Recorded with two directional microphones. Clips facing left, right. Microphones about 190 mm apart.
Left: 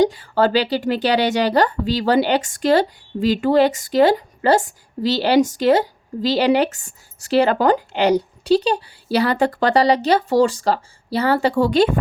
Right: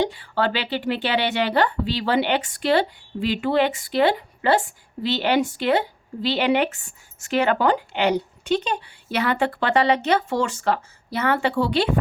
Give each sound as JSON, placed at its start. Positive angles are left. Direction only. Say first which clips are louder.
{"t": 0.0, "sound": "speech", "louder": "left 6 dB", "side_deg": 40}